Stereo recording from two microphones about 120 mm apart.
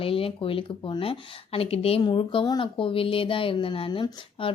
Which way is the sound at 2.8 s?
50° left (ahead or behind).